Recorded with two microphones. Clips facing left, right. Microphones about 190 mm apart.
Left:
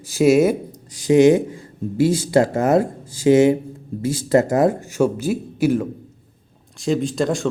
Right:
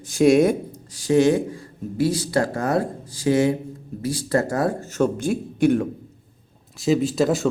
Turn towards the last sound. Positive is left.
turn(degrees=-5)  # may be behind; listen again after turning